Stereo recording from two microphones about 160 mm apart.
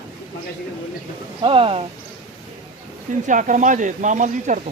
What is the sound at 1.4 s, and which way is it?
Speech, 35° right (ahead or behind).